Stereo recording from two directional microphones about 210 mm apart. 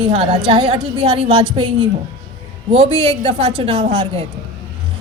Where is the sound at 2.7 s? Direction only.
30° right (ahead or behind).